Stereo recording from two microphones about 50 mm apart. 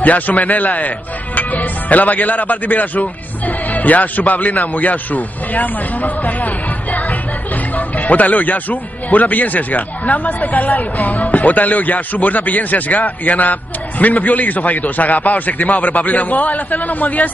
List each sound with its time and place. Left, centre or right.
0.0 s speech: left